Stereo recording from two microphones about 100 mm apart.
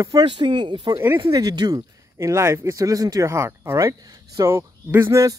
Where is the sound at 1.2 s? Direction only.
40° right (ahead or behind).